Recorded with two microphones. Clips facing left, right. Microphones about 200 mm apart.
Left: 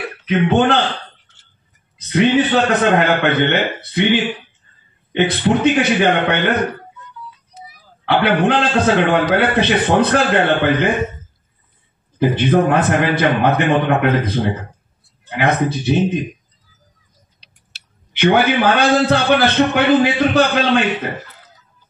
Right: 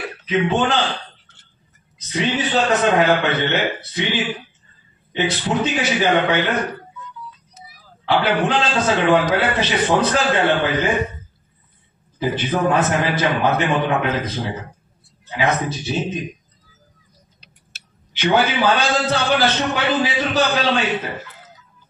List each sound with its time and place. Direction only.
0.3 s a man's voice: 60° left (ahead or behind)
2.0 s a man's voice: 60° left (ahead or behind)
8.0 s a man's voice: 60° left (ahead or behind)
12.2 s a man's voice: 60° left (ahead or behind)
18.1 s a man's voice: 60° left (ahead or behind)